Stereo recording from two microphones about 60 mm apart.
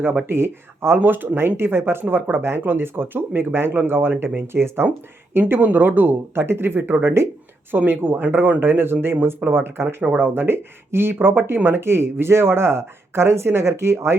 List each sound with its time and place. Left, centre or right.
0.3 s speech: right
7.7 s speech: right